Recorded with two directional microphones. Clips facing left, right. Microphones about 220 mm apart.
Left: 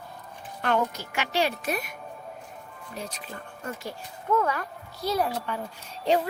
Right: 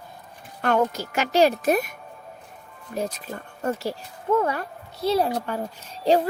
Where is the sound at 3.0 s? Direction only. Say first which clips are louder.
Right 9 dB; 45° right (ahead or behind).